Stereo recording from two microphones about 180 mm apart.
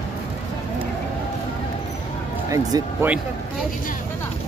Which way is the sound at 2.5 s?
20° right (ahead or behind).